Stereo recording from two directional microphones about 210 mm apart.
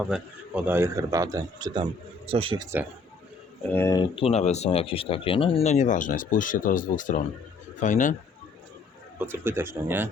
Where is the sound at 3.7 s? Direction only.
10° left (ahead or behind); by 8.1 s 35° left (ahead or behind).